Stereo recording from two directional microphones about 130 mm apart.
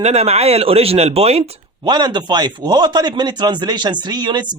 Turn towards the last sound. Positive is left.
turn(degrees=-35)  # may be behind; listen again after turning